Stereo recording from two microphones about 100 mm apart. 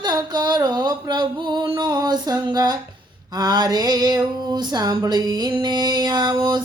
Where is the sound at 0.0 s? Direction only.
45° right (ahead or behind).